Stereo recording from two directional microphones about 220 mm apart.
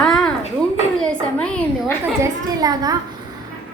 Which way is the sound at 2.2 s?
15° right (ahead or behind).